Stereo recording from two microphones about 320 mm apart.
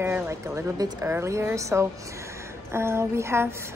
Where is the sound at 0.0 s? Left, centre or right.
Centre.